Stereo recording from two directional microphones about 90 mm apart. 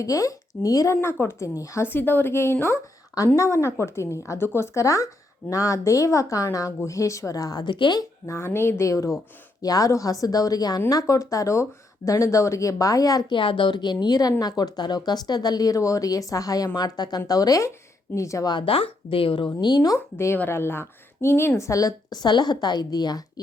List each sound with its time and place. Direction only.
0.0 s a woman's voice: 40° left (ahead or behind)
1.0 s a woman's voice: 30° left (ahead or behind)
7.6 s a woman's voice: 60° left (ahead or behind)
8.3 s a woman's voice: 30° left (ahead or behind)
13.3 s a woman's voice: 65° left (ahead or behind); by 18.4 s 35° left (ahead or behind)
18.6 s speech: 90° left
19.6 s speech: 50° left (ahead or behind)
20.1 s a woman's voice: 30° left (ahead or behind); by 23.2 s 50° left (ahead or behind)